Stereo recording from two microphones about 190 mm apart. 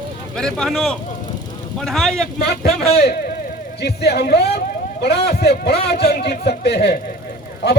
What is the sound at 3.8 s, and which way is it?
A man's voice, 60° left (ahead or behind).